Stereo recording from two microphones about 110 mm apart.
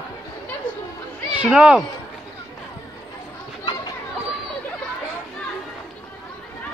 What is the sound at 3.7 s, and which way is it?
Children playing, 40° left (ahead or behind).